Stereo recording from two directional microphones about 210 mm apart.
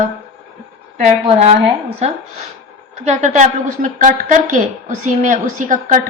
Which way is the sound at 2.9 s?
35° right (ahead or behind).